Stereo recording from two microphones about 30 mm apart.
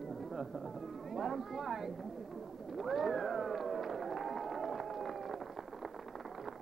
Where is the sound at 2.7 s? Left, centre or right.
Centre.